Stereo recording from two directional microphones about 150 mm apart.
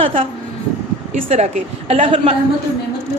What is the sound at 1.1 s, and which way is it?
Speech, 50° right (ahead or behind).